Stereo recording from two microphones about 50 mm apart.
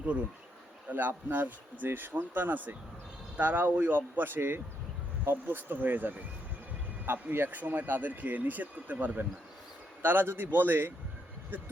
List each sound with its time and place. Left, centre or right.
0.9 s speech: right